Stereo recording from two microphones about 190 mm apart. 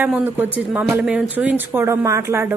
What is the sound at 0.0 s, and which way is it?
Speech, 10° right (ahead or behind).